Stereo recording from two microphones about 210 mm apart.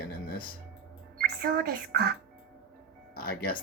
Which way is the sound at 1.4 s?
45° right (ahead or behind).